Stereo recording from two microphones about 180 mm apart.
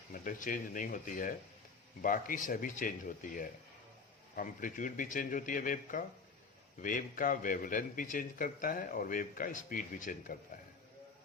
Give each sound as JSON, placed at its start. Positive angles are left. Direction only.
{"t": 0.1, "sound": "a man's voice", "side_deg": 45}